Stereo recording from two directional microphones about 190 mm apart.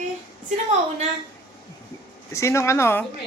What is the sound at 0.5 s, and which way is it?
Speech, 35° right (ahead or behind).